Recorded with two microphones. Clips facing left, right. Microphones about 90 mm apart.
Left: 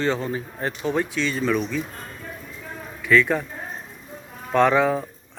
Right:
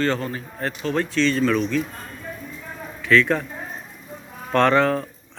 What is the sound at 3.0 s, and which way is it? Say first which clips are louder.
Speech: right 1 dB; 10° left (ahead or behind).